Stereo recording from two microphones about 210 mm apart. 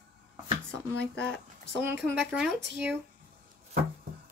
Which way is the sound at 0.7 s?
5° left (ahead or behind).